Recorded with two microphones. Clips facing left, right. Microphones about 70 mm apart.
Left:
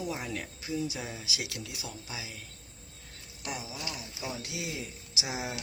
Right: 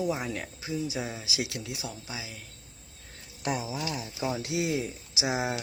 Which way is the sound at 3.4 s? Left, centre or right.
Right.